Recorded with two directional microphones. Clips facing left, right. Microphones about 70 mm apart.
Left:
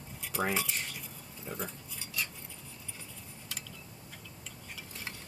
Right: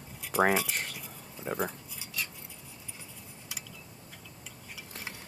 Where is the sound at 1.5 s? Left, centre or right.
Right.